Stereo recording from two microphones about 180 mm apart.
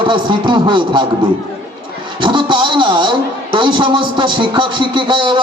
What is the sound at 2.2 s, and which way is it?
A man's voice, 25° right (ahead or behind).